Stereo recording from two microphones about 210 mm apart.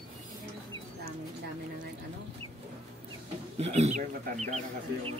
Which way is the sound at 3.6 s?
30° right (ahead or behind).